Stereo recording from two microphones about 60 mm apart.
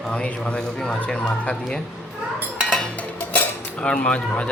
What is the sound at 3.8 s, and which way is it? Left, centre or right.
Speech, centre.